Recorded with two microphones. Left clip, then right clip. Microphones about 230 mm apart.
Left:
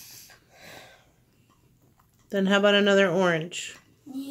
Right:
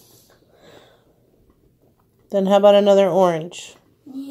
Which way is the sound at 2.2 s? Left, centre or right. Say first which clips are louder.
Right 9 dB; centre.